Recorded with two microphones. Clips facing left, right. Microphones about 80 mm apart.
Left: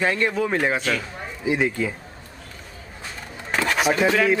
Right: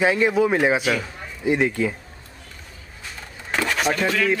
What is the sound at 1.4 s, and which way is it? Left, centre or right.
Speech, centre.